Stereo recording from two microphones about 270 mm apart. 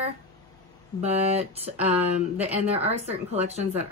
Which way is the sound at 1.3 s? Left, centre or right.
Right.